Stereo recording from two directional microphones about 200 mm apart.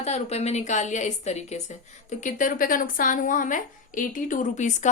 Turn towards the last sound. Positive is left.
turn(degrees=35)  # may be behind; listen again after turning